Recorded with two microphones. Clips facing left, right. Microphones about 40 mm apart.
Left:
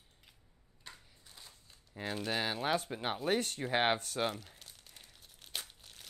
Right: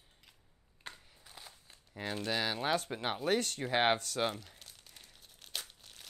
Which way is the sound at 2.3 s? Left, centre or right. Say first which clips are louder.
Right 1 dB; centre.